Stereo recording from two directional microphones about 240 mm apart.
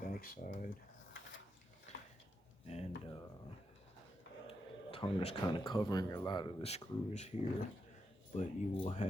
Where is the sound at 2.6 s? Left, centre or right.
Left.